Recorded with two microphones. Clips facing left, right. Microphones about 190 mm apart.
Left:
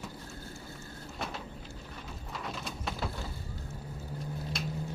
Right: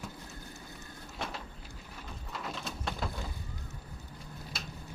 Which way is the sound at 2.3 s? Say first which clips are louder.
Even; centre (ahead or behind).